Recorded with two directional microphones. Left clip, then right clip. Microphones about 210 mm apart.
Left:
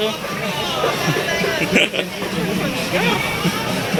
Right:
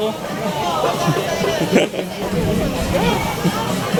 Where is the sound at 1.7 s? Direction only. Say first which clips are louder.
Left 1 dB; 25° right (ahead or behind).